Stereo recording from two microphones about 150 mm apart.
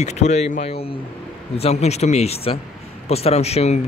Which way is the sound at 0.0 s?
50° left (ahead or behind).